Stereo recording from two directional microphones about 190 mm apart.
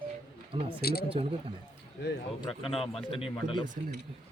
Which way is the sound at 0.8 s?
55° left (ahead or behind).